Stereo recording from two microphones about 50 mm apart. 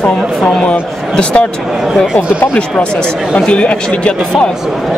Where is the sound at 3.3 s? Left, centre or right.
Left.